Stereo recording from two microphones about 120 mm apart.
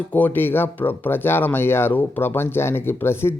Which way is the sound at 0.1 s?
15° left (ahead or behind).